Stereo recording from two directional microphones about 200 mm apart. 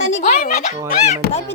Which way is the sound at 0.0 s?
35° left (ahead or behind).